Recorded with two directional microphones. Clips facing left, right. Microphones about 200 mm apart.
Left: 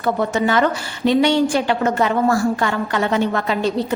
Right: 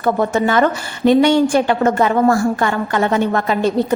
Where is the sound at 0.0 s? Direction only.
50° right (ahead or behind).